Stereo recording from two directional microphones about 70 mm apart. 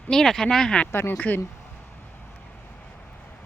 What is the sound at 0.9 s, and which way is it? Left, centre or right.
Speech, left.